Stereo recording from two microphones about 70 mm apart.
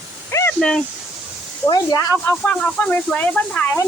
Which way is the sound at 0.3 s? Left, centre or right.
Left.